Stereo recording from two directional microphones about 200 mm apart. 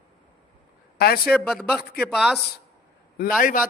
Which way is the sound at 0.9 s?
50° left (ahead or behind).